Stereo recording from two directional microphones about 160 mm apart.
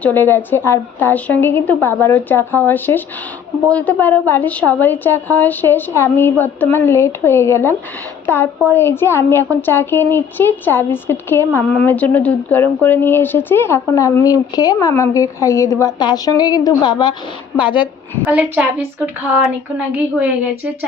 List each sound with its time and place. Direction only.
0.0 s a woman's voice: 10° left (ahead or behind); by 17.8 s 30° left (ahead or behind)
18.3 s a woman's voice: 10° right (ahead or behind)